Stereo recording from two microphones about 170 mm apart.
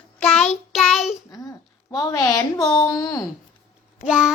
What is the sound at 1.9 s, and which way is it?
Speech, 20° left (ahead or behind).